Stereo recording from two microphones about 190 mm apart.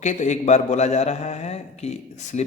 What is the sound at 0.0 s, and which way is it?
A man's voice, 40° left (ahead or behind).